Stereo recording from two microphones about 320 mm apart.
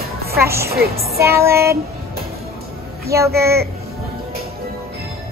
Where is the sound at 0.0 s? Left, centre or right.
Right.